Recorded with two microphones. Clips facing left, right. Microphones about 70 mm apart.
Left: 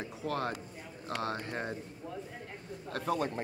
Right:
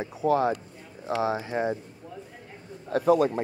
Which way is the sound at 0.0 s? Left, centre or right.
Centre.